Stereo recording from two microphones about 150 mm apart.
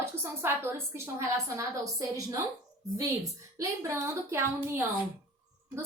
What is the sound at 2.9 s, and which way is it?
A woman's voice, 20° right (ahead or behind).